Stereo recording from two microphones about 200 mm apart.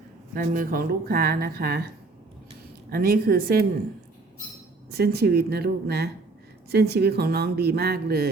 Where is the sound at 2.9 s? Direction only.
50° right (ahead or behind).